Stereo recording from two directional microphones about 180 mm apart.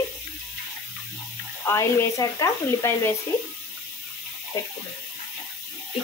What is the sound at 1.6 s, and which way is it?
Speech, 15° left (ahead or behind).